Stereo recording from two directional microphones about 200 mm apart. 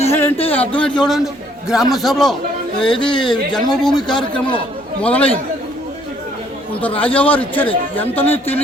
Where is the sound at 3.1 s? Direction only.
25° left (ahead or behind).